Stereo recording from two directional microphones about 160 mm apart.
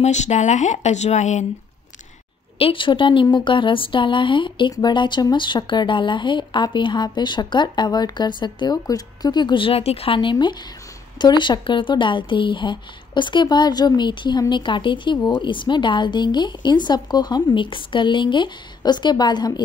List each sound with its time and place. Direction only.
0.0 s speech: 45° left (ahead or behind)
2.6 s speech: 30° left (ahead or behind)